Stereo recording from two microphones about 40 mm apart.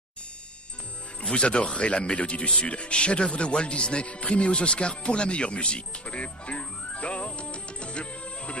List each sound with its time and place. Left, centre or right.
1.2 s speech: left